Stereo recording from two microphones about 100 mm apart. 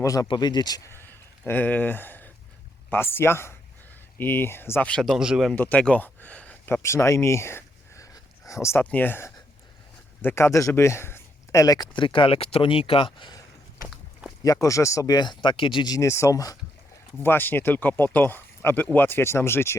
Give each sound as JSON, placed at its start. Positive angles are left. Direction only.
{"t": 0.0, "sound": "speech", "side_deg": 35}
{"t": 0.9, "sound": "a sound", "side_deg": 20}
{"t": 2.9, "sound": "speech", "side_deg": 25}
{"t": 5.0, "sound": "speech", "side_deg": -10}
{"t": 5.5, "sound": "speech", "side_deg": 15}
{"t": 6.8, "sound": "a sound", "side_deg": 30}
{"t": 8.8, "sound": "speech", "side_deg": 20}
{"t": 11.9, "sound": "speech", "side_deg": 55}
{"t": 13.9, "sound": "walk", "side_deg": -5}
{"t": 14.4, "sound": "speech", "side_deg": 35}
{"t": 15.9, "sound": "speech", "side_deg": 30}
{"t": 17.2, "sound": "speech", "side_deg": 20}